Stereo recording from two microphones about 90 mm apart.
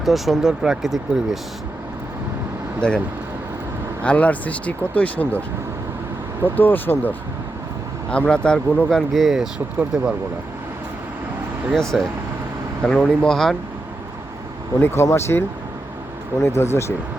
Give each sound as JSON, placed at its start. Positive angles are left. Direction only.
{"t": 0.0, "sound": "speech", "side_deg": 0}
{"t": 2.8, "sound": "speech", "side_deg": 10}
{"t": 4.0, "sound": "speech", "side_deg": 15}
{"t": 6.4, "sound": "speech", "side_deg": 20}
{"t": 8.1, "sound": "speech", "side_deg": 10}
{"t": 11.7, "sound": "speech", "side_deg": 5}
{"t": 14.8, "sound": "speech", "side_deg": 25}